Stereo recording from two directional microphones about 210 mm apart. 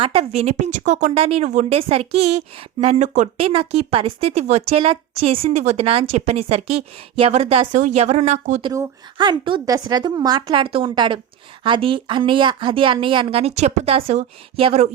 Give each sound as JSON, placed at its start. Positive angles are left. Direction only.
{"t": 0.0, "sound": "speech", "side_deg": -25}
{"t": 8.7, "sound": "speech", "side_deg": -20}